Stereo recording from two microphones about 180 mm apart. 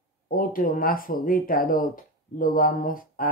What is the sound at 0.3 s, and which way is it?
Speech, 50° left (ahead or behind).